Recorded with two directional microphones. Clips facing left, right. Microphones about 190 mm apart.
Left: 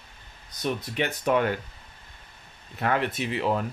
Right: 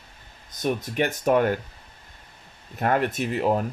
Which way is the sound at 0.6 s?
50° right (ahead or behind).